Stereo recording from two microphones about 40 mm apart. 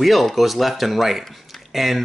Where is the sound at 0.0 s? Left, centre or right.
Centre.